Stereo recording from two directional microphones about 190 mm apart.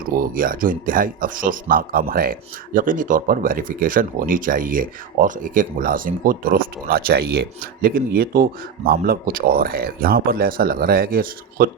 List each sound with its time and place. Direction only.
0.1 s speech: 50° right (ahead or behind)